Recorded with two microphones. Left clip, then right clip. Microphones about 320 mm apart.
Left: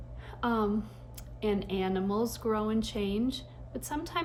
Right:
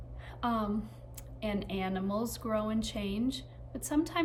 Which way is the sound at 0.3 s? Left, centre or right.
Centre.